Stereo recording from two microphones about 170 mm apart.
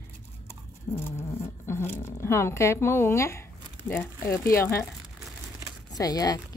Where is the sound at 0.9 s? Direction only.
15° left (ahead or behind).